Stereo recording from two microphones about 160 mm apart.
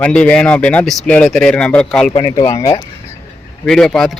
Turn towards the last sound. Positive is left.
turn(degrees=0)  # may be behind; listen again after turning